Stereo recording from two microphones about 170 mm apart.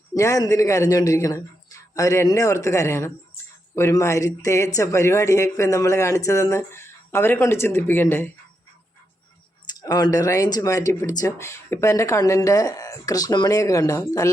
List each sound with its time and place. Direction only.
0.1 s speech: 20° left (ahead or behind)
9.6 s speech: 20° left (ahead or behind)